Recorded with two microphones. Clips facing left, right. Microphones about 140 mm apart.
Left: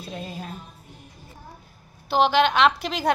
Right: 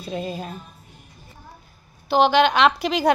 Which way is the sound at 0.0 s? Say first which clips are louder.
Right 6 dB; 5° right (ahead or behind).